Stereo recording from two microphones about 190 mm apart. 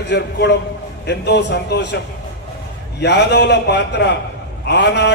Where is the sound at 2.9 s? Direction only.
60° left (ahead or behind).